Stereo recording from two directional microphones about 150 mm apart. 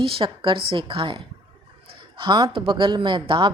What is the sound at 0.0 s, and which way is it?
Speech, 35° right (ahead or behind).